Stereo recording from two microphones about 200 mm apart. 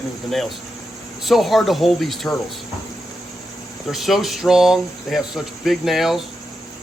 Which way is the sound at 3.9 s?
Centre (ahead or behind).